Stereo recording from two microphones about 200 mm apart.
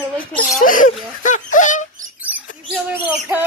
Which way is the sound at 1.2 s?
40° left (ahead or behind).